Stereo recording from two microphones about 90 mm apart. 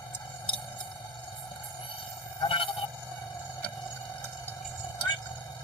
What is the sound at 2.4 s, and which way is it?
Honk, 75° left (ahead or behind).